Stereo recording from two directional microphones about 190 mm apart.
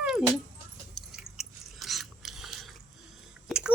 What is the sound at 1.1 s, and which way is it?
Chewing, centre (ahead or behind).